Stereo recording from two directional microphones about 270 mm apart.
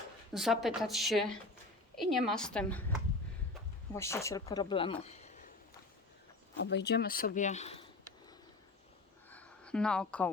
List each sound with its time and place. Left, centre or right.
0.3 s speech: centre
3.9 s speech: centre; by 5.5 s left
6.6 s speech: left
9.3 s a sound: centre